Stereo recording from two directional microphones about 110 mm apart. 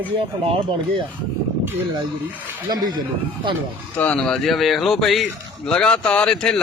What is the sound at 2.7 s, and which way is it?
Speech, 40° right (ahead or behind).